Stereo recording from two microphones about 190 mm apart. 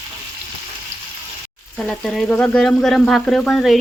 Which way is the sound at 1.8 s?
Centre (ahead or behind).